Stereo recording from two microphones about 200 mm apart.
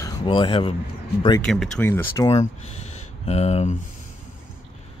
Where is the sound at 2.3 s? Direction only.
30° left (ahead or behind).